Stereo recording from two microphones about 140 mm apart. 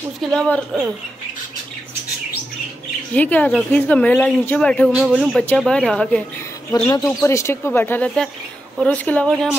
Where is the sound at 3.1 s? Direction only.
10° left (ahead or behind).